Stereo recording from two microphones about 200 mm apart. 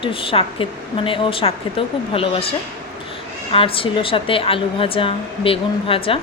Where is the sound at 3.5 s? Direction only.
25° left (ahead or behind).